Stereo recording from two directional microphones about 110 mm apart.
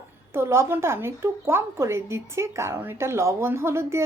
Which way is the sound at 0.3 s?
25° right (ahead or behind).